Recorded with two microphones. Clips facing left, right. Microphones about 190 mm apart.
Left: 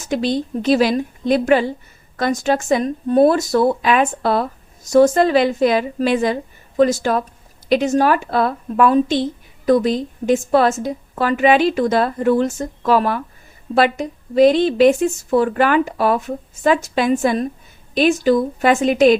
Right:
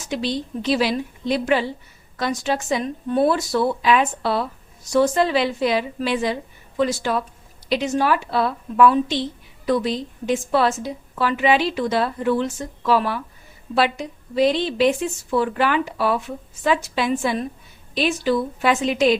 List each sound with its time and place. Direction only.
0.0 s a woman's voice: 50° left (ahead or behind)